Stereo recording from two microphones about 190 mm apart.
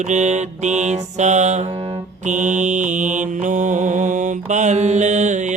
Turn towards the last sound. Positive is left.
turn(degrees=-40)  # may be behind; listen again after turning